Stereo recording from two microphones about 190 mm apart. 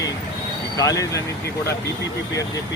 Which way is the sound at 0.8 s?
20° left (ahead or behind).